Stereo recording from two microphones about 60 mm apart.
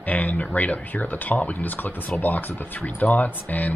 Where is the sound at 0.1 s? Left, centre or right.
Left.